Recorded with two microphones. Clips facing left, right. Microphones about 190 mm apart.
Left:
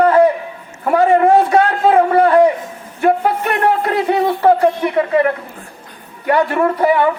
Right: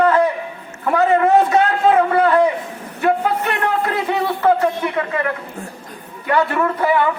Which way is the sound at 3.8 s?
35° left (ahead or behind).